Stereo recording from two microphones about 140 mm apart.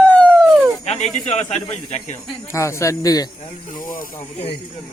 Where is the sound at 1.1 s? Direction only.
50° left (ahead or behind).